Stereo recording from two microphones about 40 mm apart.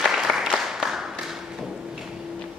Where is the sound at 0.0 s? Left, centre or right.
Centre.